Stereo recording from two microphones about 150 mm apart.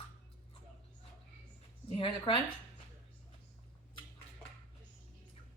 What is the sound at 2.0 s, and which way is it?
Speech, 35° left (ahead or behind).